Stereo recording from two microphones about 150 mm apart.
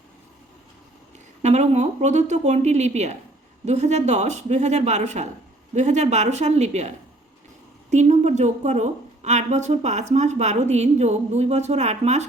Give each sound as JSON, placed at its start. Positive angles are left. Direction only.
{"t": 1.4, "sound": "speech", "side_deg": -50}